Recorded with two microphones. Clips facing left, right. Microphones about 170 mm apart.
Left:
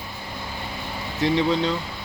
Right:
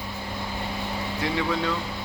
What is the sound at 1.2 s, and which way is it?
Speech, 25° left (ahead or behind).